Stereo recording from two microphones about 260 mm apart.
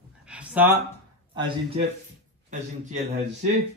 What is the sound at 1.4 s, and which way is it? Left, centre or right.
Speech, centre.